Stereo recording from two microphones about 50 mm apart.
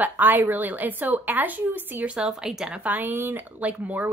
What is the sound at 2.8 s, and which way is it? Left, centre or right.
Speech, right.